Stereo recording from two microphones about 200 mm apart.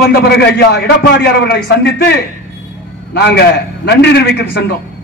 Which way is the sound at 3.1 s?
55° left (ahead or behind).